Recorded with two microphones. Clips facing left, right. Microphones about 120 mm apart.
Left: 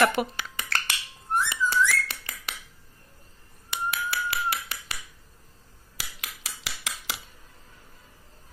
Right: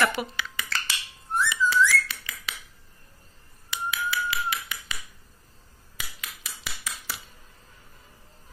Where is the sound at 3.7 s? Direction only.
55° left (ahead or behind).